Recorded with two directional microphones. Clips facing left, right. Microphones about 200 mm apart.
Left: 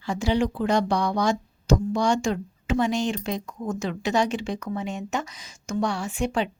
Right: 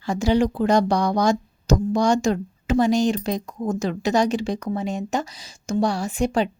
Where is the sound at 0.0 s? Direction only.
40° right (ahead or behind).